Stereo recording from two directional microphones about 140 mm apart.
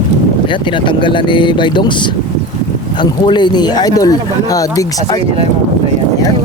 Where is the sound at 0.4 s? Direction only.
35° left (ahead or behind).